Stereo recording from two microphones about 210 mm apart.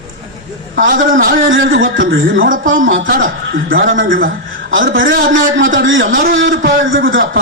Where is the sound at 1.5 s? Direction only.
65° right (ahead or behind).